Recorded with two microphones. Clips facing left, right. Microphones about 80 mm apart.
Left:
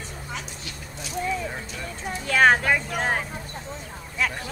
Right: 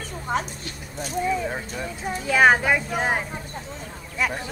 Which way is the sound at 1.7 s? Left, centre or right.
Centre.